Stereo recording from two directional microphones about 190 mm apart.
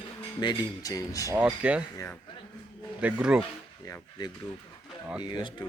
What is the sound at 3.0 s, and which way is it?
Speech, 5° right (ahead or behind).